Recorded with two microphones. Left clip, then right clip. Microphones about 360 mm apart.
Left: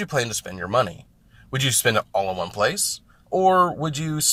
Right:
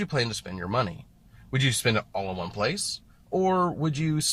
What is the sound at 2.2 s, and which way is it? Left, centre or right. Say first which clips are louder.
Speech: left 6 dB; left.